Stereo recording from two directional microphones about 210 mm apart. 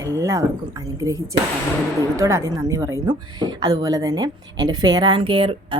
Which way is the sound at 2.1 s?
15° right (ahead or behind).